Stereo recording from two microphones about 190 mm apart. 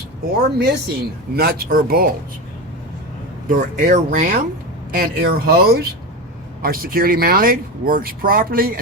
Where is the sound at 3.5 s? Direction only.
45° right (ahead or behind).